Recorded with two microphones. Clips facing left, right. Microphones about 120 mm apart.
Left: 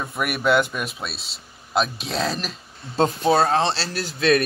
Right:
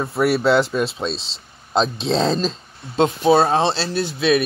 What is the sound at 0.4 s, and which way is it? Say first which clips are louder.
Speech: right 3 dB; 20° right (ahead or behind).